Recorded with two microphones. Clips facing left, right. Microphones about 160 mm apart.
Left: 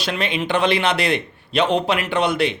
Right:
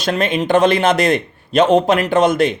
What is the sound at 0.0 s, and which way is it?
A man's voice, 45° right (ahead or behind).